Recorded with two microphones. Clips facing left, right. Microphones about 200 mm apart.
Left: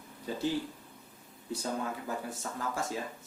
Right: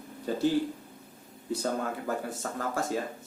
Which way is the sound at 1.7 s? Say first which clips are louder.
Right 4 dB; 50° right (ahead or behind).